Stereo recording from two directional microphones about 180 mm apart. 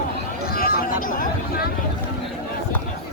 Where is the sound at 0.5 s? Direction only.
55° left (ahead or behind).